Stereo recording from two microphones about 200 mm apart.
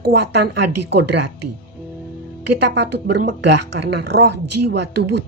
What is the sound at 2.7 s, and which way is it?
Speech, 60° right (ahead or behind).